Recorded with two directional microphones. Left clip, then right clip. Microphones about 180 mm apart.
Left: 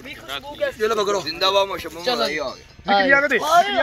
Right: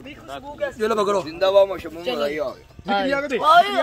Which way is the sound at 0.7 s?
60° right (ahead or behind).